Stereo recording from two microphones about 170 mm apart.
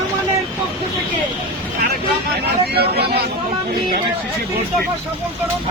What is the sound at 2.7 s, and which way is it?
Speech, 70° right (ahead or behind).